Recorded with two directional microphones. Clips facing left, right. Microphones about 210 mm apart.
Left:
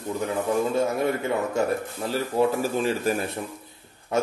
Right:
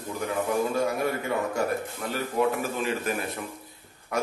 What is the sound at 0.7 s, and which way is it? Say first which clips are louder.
A man's voice: left 3 dB; 25° left (ahead or behind).